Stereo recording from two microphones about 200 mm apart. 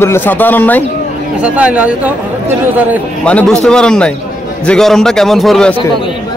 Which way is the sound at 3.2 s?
5° left (ahead or behind).